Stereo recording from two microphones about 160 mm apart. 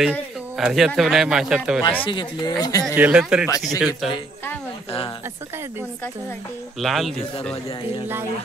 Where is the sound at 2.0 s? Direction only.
30° left (ahead or behind).